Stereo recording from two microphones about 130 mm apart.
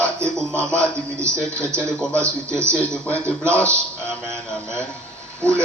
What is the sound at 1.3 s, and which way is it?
Speech, 10° left (ahead or behind).